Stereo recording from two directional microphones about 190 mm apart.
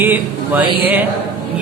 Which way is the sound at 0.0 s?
10° right (ahead or behind).